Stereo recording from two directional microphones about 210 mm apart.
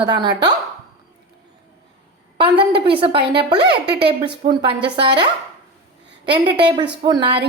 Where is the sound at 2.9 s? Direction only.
25° right (ahead or behind).